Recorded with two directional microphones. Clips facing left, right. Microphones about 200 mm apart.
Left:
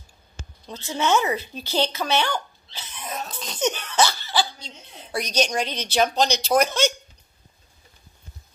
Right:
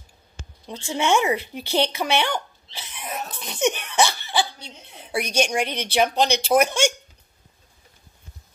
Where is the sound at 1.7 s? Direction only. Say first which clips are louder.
Right 1 dB; 15° right (ahead or behind).